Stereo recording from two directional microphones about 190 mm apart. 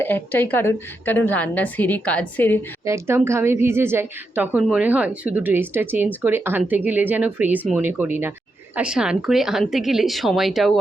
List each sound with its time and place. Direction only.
0.0 s a woman's voice: 10° left (ahead or behind)
2.8 s a woman's voice: 15° right (ahead or behind)